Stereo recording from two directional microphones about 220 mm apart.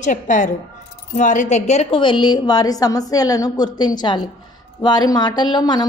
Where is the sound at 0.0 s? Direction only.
35° left (ahead or behind).